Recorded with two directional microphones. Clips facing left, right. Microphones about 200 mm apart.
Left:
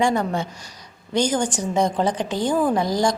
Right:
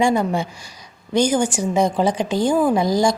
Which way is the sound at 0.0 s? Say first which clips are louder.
Right 3 dB; 10° right (ahead or behind).